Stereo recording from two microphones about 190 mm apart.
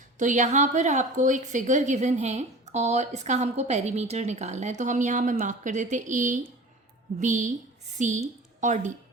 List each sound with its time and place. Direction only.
0.2 s a woman's voice: 40° right (ahead or behind)